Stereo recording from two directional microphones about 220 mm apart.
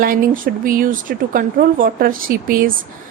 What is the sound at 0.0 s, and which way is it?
A woman's voice, 40° right (ahead or behind).